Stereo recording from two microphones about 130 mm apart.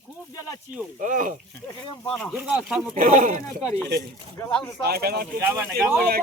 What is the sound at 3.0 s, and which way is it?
Speech, 90° right.